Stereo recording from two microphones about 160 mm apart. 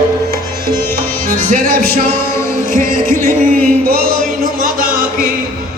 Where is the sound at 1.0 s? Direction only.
65° right (ahead or behind).